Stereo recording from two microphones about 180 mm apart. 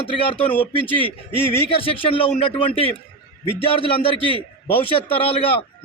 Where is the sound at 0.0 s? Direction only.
30° left (ahead or behind).